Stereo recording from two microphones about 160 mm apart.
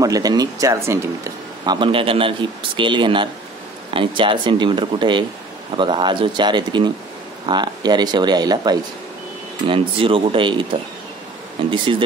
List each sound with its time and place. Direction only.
0.0 s speech: 20° right (ahead or behind)
11.7 s speech: 30° right (ahead or behind)